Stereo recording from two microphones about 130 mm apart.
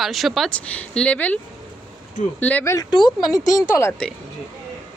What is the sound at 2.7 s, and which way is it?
A woman's voice, 30° left (ahead or behind).